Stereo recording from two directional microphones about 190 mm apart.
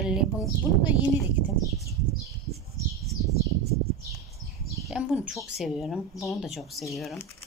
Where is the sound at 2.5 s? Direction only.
35° right (ahead or behind).